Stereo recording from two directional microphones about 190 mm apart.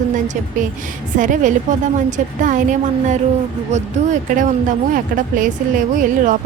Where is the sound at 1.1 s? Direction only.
40° right (ahead or behind).